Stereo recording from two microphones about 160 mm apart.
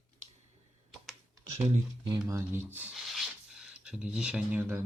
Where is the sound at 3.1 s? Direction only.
5° right (ahead or behind).